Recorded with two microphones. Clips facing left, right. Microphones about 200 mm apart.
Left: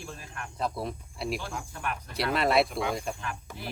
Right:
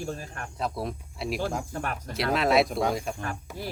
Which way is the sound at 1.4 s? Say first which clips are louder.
Right 6 dB; 45° right (ahead or behind).